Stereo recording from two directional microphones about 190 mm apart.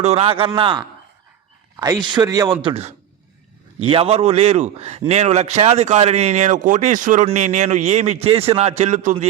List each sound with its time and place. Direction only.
0.0 s a man's voice: 35° right (ahead or behind)
2.6 s a man's voice: 30° right (ahead or behind)